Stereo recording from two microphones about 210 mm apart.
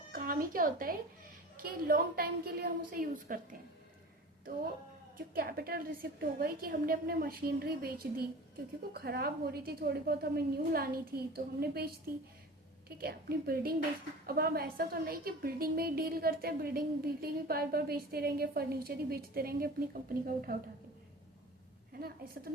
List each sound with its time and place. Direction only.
0.1 s a sound: 45° right (ahead or behind)
1.5 s a woman's voice: 45° right (ahead or behind)
5.1 s a woman's voice: 45° right (ahead or behind)
13.0 s a woman's voice: 45° right (ahead or behind)